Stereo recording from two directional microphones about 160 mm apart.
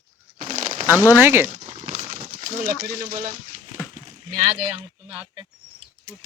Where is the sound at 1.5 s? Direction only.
50° right (ahead or behind).